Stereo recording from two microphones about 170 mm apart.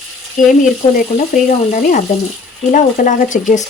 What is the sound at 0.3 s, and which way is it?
Speech, 50° left (ahead or behind).